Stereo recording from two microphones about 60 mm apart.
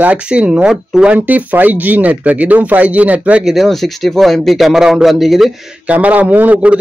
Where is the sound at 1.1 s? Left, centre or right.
Right.